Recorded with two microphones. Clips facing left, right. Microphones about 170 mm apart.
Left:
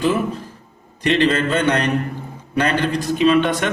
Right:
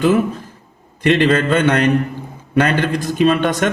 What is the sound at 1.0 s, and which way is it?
A man's voice, 55° right (ahead or behind).